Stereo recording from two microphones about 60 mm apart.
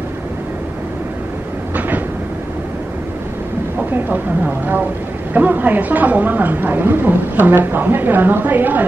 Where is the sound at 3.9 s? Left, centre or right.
Right.